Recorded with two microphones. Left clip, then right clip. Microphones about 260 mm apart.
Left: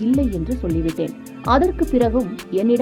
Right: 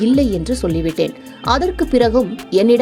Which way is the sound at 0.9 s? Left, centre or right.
Right.